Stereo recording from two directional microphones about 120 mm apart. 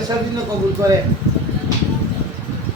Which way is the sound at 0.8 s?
25° right (ahead or behind).